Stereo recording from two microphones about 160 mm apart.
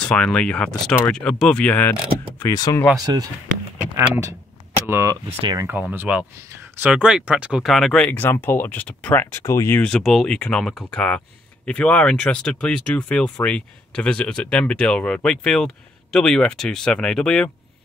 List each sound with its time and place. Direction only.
0.0 s speech: 5° left (ahead or behind); by 2.8 s 20° left (ahead or behind)
3.9 s speech: 20° right (ahead or behind); by 8.1 s centre (ahead or behind)
8.1 s speech: 10° left (ahead or behind)